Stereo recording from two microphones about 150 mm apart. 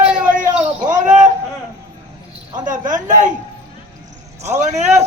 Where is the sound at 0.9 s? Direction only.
60° right (ahead or behind).